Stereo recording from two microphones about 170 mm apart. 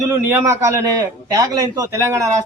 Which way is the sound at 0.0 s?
15° right (ahead or behind).